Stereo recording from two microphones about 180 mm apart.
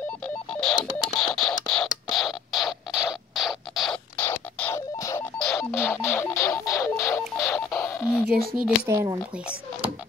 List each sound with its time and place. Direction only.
0.2 s telephone dialing: 5° left (ahead or behind)
8.8 s speech: 15° right (ahead or behind)